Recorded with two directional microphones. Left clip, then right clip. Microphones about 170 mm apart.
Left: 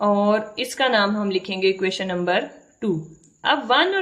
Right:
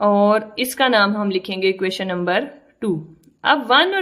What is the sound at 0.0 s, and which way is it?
A woman's voice, 30° right (ahead or behind).